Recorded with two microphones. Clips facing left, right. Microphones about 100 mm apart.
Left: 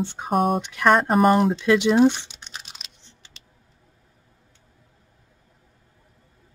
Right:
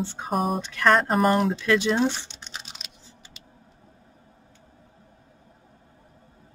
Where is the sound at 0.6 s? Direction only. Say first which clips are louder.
Left 2 dB; 15° left (ahead or behind).